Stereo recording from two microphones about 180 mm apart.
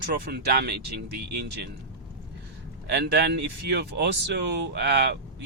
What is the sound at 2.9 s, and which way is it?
Speech, 70° right (ahead or behind).